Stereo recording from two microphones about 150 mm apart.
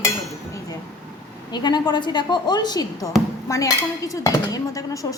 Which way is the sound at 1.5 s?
30° left (ahead or behind).